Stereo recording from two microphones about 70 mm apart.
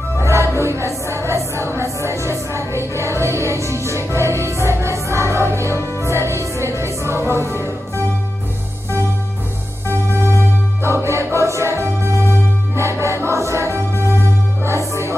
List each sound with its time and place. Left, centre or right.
0.2 s music: right
11.0 s music: right